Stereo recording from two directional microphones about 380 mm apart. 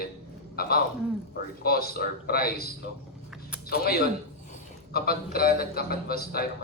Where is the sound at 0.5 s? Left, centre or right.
Left.